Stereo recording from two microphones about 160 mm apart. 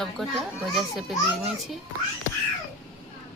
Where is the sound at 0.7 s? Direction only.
Centre (ahead or behind).